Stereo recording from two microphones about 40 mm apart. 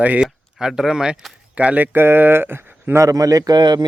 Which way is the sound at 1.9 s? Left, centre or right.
Right.